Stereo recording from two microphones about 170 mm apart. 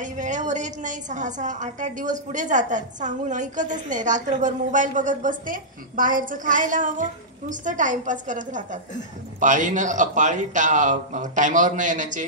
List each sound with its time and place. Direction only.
0.0 s a woman's voice: 45° right (ahead or behind)